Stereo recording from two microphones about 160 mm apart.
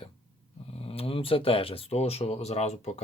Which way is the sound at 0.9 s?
35° left (ahead or behind).